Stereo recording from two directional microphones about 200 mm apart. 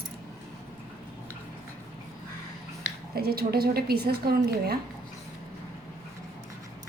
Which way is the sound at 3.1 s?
50° right (ahead or behind).